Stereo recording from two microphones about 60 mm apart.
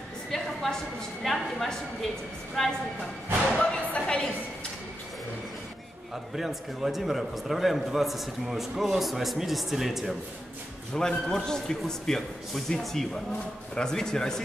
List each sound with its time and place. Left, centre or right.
0.3 s a sound: centre
1.2 s a man's voice: centre
3.5 s music: centre
6.3 s a man's voice: centre
11.0 s a man's voice: centre